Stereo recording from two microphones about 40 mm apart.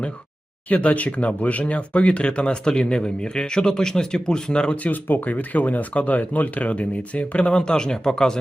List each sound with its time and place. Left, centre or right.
0.7 s speech: left
4.8 s speech: left; by 8.4 s centre